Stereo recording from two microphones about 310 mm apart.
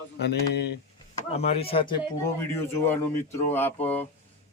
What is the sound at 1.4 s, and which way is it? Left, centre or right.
Speech, centre.